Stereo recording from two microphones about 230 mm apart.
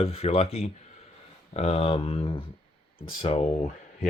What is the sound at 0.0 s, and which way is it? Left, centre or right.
Speech, left.